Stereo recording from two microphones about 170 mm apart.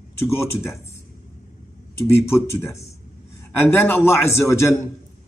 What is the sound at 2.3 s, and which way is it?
A man's voice, 15° left (ahead or behind).